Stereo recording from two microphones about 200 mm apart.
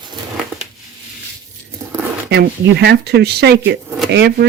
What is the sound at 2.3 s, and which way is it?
Speech, 55° right (ahead or behind).